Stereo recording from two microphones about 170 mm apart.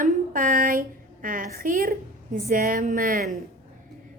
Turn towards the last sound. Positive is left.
turn(degrees=-50)  # may be behind; listen again after turning